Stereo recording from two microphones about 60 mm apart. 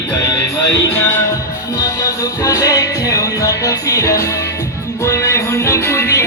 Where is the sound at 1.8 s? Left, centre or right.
Left.